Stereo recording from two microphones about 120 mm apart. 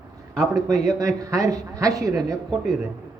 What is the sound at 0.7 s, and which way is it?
A man's voice, 30° right (ahead or behind).